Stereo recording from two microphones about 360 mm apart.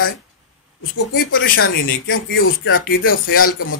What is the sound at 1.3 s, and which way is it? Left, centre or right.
Speech, left.